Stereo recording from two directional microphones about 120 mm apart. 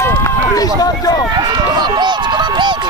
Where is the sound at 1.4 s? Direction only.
35° right (ahead or behind).